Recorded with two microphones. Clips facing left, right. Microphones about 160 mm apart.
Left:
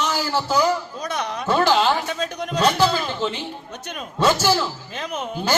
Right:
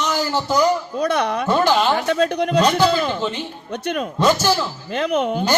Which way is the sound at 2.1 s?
60° right (ahead or behind).